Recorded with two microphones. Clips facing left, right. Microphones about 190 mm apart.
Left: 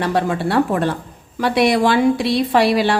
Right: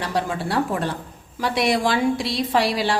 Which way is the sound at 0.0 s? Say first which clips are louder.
Left 6 dB; 60° left (ahead or behind).